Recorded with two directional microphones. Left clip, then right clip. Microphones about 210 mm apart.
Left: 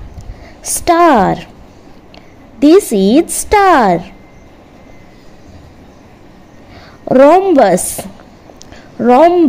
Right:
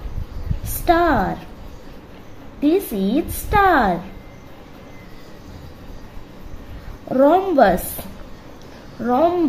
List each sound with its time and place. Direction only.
0.8 s a woman's voice: 35° left (ahead or behind)
2.6 s a woman's voice: 35° left (ahead or behind)
7.1 s a woman's voice: 35° left (ahead or behind)